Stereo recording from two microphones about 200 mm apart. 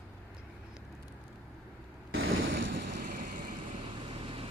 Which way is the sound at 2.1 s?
70° right (ahead or behind).